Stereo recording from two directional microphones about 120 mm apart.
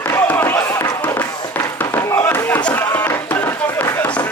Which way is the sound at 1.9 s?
15° left (ahead or behind).